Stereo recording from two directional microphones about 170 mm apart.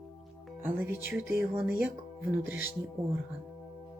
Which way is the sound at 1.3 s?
15° right (ahead or behind).